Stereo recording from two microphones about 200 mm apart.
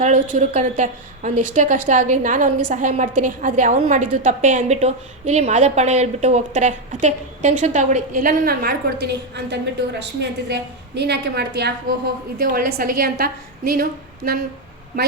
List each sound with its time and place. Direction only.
0.0 s a woman's voice: 35° right (ahead or behind)